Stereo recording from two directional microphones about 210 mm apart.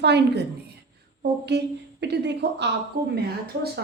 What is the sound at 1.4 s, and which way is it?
A woman's voice, 55° right (ahead or behind).